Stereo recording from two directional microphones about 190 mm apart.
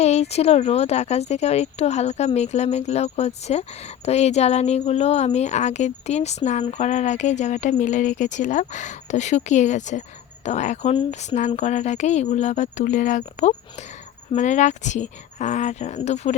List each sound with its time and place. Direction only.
0.0 s speech: 35° left (ahead or behind)